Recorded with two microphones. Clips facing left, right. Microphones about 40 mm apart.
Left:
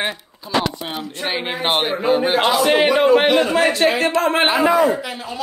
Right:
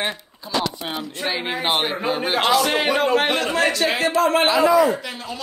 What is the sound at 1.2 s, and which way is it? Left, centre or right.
A man's voice, centre.